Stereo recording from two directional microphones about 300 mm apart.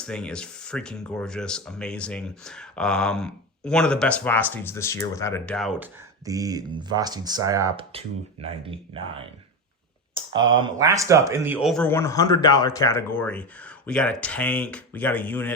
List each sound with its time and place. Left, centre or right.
0.0 s speech: centre
6.2 s speech: centre
10.3 s speech: centre